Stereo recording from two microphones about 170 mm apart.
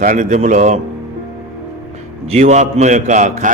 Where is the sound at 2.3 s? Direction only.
45° right (ahead or behind).